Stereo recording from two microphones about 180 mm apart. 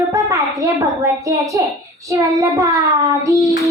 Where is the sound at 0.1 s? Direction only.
15° right (ahead or behind).